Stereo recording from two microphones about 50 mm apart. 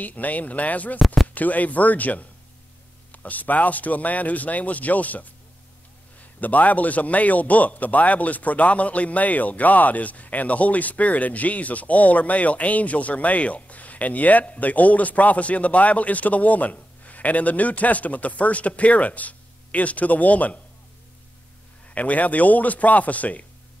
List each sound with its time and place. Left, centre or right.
0.0 s a man's voice: left
0.9 s speech: centre
1.3 s a man's voice: left
6.4 s a man's voice: left
21.8 s a man's voice: left